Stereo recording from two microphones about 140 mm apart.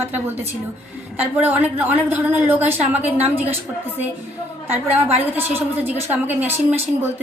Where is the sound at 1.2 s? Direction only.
10° right (ahead or behind).